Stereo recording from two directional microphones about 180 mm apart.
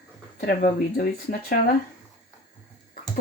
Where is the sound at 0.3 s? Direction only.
50° left (ahead or behind).